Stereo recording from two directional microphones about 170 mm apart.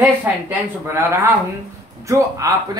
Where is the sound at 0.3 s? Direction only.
10° right (ahead or behind).